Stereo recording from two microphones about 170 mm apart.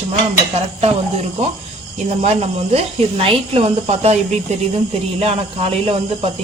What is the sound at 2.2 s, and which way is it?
Speech, 40° right (ahead or behind).